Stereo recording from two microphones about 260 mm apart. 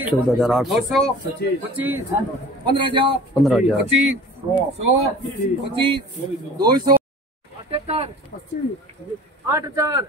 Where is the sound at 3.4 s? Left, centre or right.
Centre.